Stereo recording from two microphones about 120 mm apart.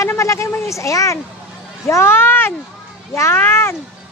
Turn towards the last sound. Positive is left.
turn(degrees=20)  # may be behind; listen again after turning